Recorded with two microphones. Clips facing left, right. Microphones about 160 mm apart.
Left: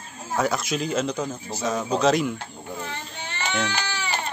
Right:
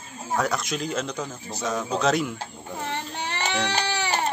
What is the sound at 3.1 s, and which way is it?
Baby cry, 70° right (ahead or behind).